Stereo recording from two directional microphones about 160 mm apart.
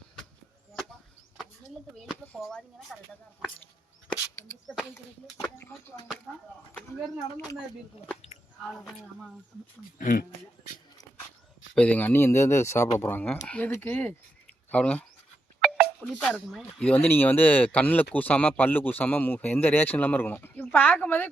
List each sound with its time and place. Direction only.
2.2 s speech: 10° left (ahead or behind)
4.7 s speech: centre (ahead or behind)
5.4 s speech: 15° left (ahead or behind)
8.6 s speech: centre (ahead or behind)
10.0 s speech: 55° left (ahead or behind)
11.7 s speech: 10° left (ahead or behind)
15.6 s a sound: centre (ahead or behind)
16.2 s speech: centre (ahead or behind)